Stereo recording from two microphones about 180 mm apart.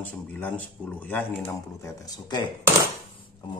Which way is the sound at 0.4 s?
10° left (ahead or behind).